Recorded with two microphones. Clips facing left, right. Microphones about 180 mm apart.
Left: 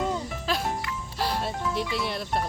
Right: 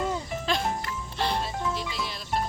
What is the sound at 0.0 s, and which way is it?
Music, 5° left (ahead or behind).